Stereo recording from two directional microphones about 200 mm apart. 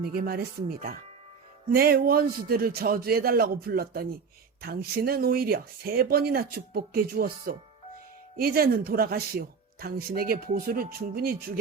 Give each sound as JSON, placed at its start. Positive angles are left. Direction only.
{"t": 0.0, "sound": "speech", "side_deg": -45}